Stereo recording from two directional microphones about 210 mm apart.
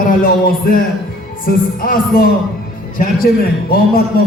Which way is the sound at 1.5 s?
45° left (ahead or behind).